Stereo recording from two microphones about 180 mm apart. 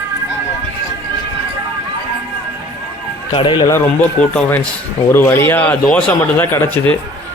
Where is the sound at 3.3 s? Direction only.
25° left (ahead or behind).